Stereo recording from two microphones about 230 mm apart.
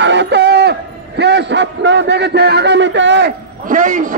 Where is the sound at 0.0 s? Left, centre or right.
Right.